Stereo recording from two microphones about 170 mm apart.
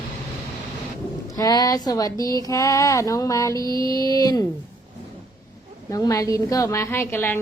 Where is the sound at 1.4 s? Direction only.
20° left (ahead or behind).